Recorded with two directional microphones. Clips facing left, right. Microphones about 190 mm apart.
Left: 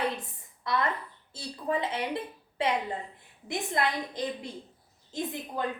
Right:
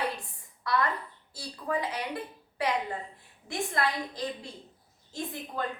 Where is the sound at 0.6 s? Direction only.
20° left (ahead or behind).